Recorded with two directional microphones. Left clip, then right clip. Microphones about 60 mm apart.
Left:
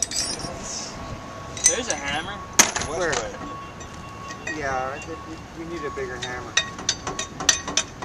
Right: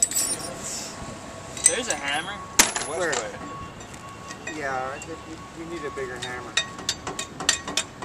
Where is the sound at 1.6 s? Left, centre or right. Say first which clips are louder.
Left 3 dB; centre.